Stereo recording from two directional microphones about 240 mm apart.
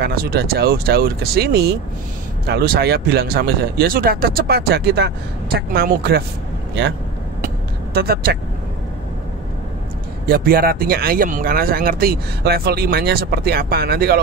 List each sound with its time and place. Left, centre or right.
0.0 s speech: right
7.4 s vehicle: right
10.2 s speech: right